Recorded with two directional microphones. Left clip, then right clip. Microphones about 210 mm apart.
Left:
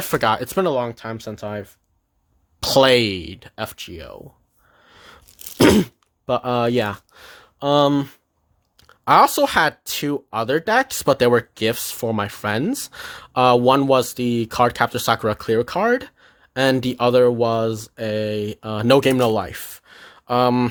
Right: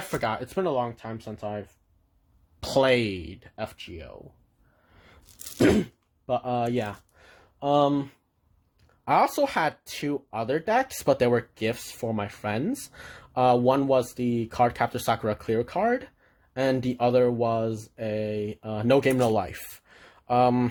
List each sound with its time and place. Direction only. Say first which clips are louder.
0.1 s speech: left 10 dB; 35° left (ahead or behind)
5.5 s speech: left 7 dB; 45° left (ahead or behind)
9.0 s speech: left 8 dB; 30° left (ahead or behind)